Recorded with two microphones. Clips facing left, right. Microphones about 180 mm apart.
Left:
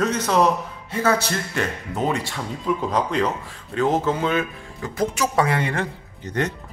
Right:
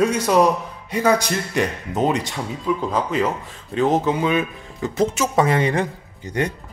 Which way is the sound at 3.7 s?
20° right (ahead or behind).